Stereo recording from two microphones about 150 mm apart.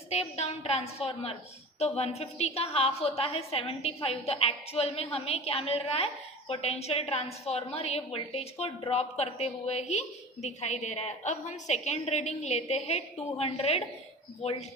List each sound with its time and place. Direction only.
0.1 s a woman's voice: 45° left (ahead or behind)